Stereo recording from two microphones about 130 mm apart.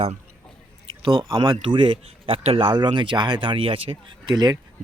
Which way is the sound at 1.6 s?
40° right (ahead or behind).